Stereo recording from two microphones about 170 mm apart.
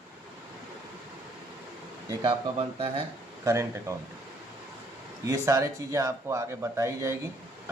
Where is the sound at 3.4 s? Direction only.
15° right (ahead or behind).